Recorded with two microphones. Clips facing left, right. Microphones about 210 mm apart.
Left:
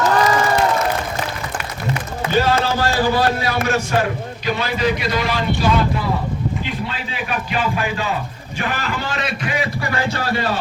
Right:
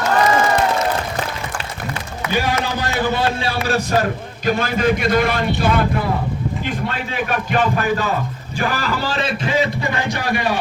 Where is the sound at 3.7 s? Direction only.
40° right (ahead or behind).